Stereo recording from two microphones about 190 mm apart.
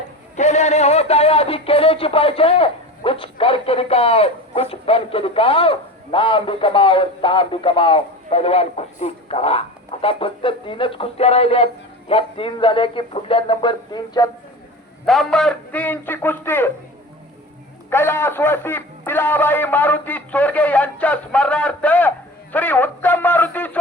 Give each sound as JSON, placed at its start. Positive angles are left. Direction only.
{"t": 0.3, "sound": "speech", "side_deg": 35}
{"t": 15.0, "sound": "speech", "side_deg": 0}
{"t": 17.9, "sound": "speech", "side_deg": 10}